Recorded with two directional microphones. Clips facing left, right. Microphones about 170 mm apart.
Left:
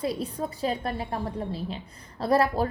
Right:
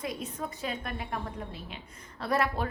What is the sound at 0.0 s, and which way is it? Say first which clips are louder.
A woman's voice: left 6 dB; 35° left (ahead or behind).